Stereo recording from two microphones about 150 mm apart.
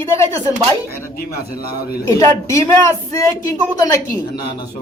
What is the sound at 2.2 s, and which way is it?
A woman's voice, 20° left (ahead or behind).